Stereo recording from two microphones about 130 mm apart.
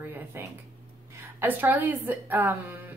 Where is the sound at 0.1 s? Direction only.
20° right (ahead or behind).